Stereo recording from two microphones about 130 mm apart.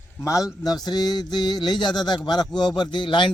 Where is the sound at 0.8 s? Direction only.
30° left (ahead or behind).